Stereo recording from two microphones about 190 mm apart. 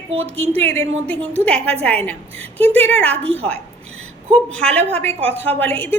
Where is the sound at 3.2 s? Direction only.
30° right (ahead or behind).